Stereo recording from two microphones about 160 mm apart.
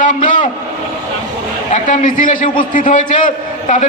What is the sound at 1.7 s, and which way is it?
A man's voice, 50° left (ahead or behind).